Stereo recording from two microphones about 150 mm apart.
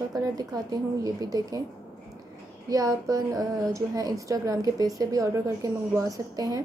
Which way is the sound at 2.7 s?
20° right (ahead or behind).